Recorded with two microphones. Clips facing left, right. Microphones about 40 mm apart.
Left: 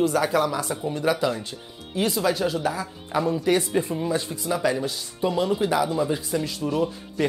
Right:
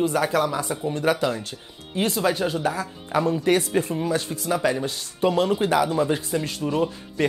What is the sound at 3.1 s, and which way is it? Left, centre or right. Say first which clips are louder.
Speech: right 2 dB; right.